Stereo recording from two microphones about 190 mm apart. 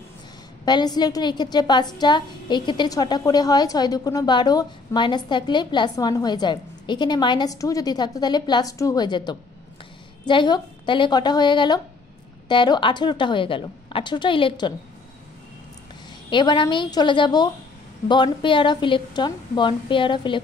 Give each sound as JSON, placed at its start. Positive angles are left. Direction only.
{"t": 0.7, "sound": "a woman's voice", "side_deg": 20}
{"t": 16.3, "sound": "a woman's voice", "side_deg": 25}